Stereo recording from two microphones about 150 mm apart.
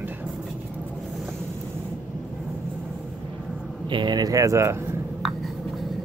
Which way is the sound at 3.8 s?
30° right (ahead or behind).